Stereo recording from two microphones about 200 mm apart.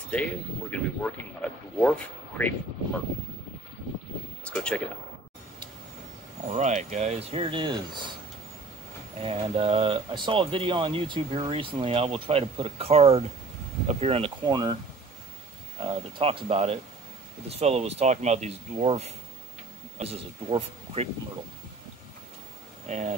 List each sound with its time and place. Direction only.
0.1 s speech: 5° left (ahead or behind)
4.5 s speech: 5° left (ahead or behind)
6.4 s speech: 35° right (ahead or behind)
9.2 s speech: 30° right (ahead or behind)
15.8 s speech: 25° right (ahead or behind)
20.4 s speech: 30° right (ahead or behind)
22.8 s speech: 35° right (ahead or behind)